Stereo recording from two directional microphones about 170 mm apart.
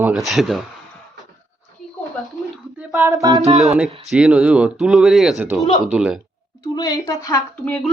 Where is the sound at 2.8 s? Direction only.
10° right (ahead or behind).